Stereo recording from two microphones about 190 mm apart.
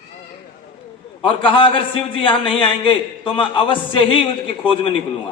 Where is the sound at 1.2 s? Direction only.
25° left (ahead or behind).